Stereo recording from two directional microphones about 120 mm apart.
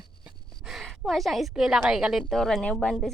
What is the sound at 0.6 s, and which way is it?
A woman's voice, centre (ahead or behind).